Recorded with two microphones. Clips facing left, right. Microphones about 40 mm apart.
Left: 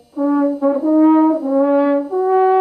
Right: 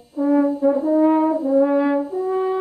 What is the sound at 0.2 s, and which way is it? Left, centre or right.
Brass instrument, left.